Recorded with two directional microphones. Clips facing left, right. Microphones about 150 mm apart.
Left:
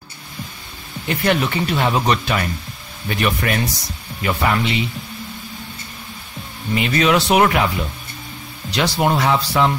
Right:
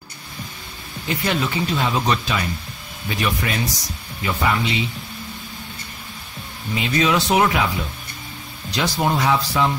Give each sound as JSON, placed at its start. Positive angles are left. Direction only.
{"t": 1.0, "sound": "speech", "side_deg": 60}
{"t": 6.7, "sound": "speech", "side_deg": 65}
{"t": 8.7, "sound": "speech", "side_deg": 70}